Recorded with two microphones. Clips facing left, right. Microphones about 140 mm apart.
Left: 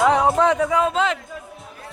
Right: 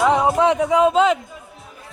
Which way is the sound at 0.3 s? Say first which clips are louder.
Right 2 dB; 15° right (ahead or behind).